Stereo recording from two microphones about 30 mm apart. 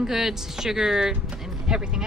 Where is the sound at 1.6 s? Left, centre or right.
Right.